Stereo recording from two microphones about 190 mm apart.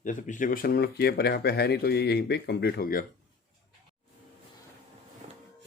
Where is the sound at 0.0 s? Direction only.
45° left (ahead or behind).